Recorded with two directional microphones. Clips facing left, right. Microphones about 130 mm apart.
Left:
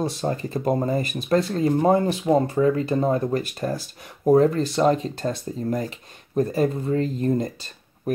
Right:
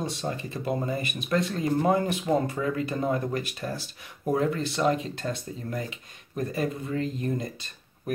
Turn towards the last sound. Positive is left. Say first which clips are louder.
# left 7 dB
turn(degrees=35)  # may be behind; listen again after turning